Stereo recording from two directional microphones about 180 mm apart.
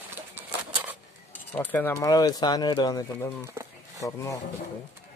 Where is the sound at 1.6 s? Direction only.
10° left (ahead or behind).